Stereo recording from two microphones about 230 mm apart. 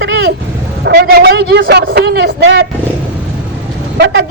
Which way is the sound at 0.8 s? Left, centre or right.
Right.